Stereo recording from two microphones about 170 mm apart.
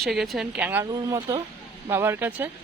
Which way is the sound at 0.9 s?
20° right (ahead or behind).